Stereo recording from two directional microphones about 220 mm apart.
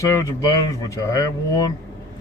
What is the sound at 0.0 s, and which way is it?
A man's voice, 15° left (ahead or behind).